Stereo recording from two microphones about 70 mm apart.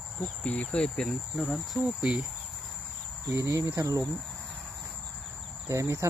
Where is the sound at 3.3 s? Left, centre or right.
Right.